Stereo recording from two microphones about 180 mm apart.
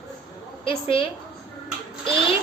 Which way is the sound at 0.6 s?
30° left (ahead or behind).